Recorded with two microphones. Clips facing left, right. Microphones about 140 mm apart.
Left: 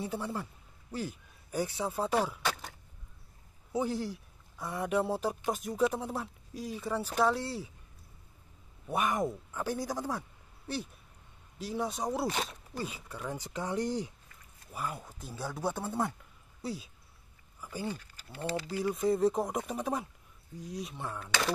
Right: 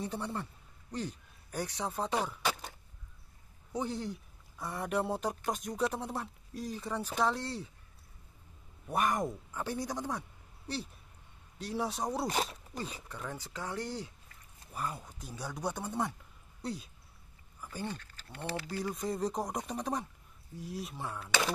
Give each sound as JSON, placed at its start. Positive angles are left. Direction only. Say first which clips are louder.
{"t": 0.0, "sound": "speech", "louder": "left 1 dB", "side_deg": 5}
{"t": 3.7, "sound": "speech", "louder": "left 3 dB", "side_deg": 5}
{"t": 8.8, "sound": "speech", "louder": "left 1 dB", "side_deg": 0}
{"t": 11.5, "sound": "speech", "louder": "left 1 dB", "side_deg": 0}
{"t": 14.7, "sound": "speech", "louder": "left 1 dB", "side_deg": 5}